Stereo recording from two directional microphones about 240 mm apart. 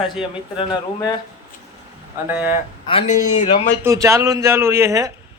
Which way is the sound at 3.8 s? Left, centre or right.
Centre.